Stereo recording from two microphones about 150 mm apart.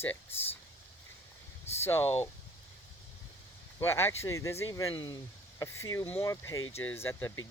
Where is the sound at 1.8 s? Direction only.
15° left (ahead or behind).